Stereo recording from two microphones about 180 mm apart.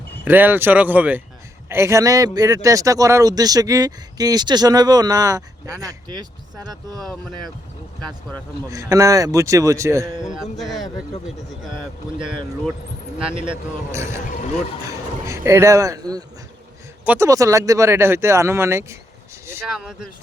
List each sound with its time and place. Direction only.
0.3 s speech: 10° right (ahead or behind)
8.7 s speech: 15° right (ahead or behind)
10.2 s a sound: centre (ahead or behind)
10.8 s speech: 20° left (ahead or behind)
13.9 s speech: 15° right (ahead or behind)
19.7 s a sound: 5° right (ahead or behind)